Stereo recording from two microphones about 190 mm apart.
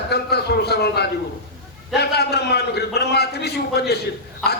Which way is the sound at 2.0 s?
60° left (ahead or behind).